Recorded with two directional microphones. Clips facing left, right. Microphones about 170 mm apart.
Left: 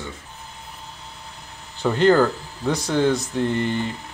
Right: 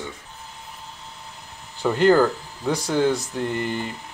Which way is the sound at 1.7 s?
10° right (ahead or behind).